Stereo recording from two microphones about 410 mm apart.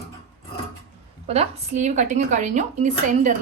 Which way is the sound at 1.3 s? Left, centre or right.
Centre.